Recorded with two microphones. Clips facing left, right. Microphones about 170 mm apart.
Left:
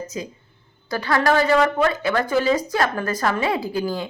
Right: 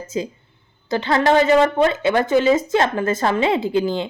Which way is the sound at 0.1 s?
25° right (ahead or behind).